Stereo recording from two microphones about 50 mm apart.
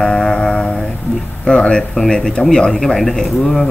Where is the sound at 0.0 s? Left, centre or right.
Centre.